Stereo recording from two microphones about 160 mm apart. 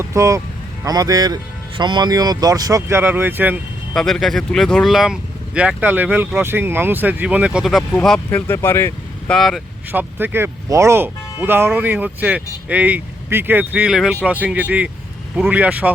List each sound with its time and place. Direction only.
0.0 s speech: 20° right (ahead or behind)
3.9 s speech: centre (ahead or behind)
9.3 s speech: centre (ahead or behind)
9.9 s speech: 10° right (ahead or behind)